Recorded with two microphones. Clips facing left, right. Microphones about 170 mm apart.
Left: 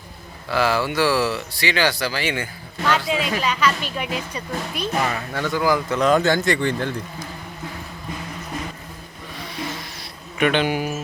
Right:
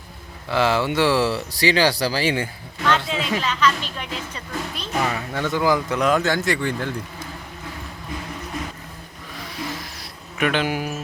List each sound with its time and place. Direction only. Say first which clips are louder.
0.4 s speech: right 1 dB; 25° right (ahead or behind)
3.1 s speech: left 2 dB; 10° left (ahead or behind)
5.0 s speech: even; 15° right (ahead or behind)
9.4 s a sound: even; centre (ahead or behind)